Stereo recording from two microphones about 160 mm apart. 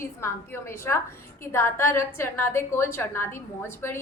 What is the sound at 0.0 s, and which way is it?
A woman's voice, 15° left (ahead or behind).